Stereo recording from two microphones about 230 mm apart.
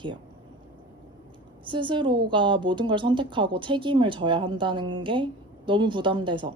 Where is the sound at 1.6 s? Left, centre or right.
Right.